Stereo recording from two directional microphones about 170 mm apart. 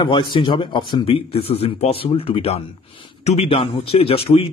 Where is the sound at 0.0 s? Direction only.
30° left (ahead or behind).